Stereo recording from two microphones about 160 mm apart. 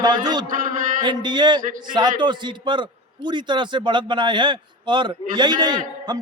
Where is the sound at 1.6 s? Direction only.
55° right (ahead or behind).